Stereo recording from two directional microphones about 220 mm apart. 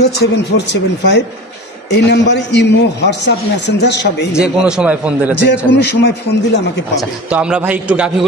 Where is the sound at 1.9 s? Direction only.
50° left (ahead or behind).